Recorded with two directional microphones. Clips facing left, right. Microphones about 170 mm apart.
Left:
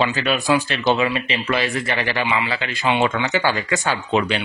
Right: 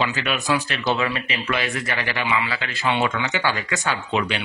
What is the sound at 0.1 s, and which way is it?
A man's voice, 35° left (ahead or behind).